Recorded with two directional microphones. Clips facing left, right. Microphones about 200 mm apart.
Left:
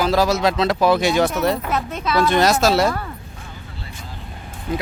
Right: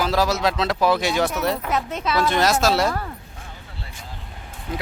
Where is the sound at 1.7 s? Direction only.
20° right (ahead or behind).